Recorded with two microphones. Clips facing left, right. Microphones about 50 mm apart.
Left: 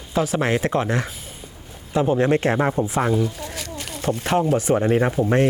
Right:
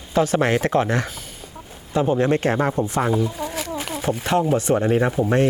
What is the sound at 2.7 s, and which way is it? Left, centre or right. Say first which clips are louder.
Speech: even; centre.